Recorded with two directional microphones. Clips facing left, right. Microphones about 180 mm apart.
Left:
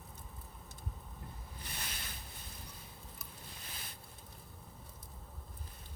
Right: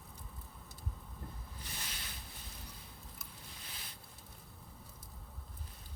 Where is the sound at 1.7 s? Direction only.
55° left (ahead or behind).